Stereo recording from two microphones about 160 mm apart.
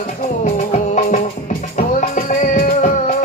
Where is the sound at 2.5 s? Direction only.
55° left (ahead or behind).